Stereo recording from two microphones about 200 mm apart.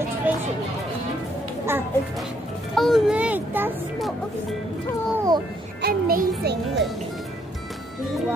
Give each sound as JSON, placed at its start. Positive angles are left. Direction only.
{"t": 0.3, "sound": "chatter", "side_deg": -10}
{"t": 2.7, "sound": "children playing", "side_deg": 0}
{"t": 5.1, "sound": "music", "side_deg": -15}
{"t": 5.8, "sound": "music", "side_deg": -50}